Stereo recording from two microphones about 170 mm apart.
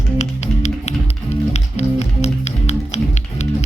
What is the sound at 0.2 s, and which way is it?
Music, 40° left (ahead or behind).